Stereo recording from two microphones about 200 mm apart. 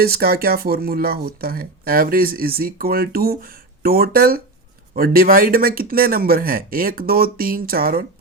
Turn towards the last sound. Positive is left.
turn(degrees=-45)  # may be behind; listen again after turning